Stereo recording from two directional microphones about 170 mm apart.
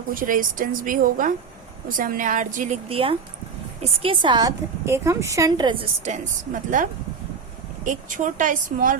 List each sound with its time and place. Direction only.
0.1 s a woman's voice: 55° right (ahead or behind)
2.9 s a woman's voice: 35° right (ahead or behind)
6.5 s a woman's voice: 50° right (ahead or behind)
7.9 s a woman's voice: 50° right (ahead or behind)